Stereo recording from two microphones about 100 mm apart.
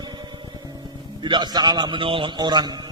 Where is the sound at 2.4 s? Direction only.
45° right (ahead or behind).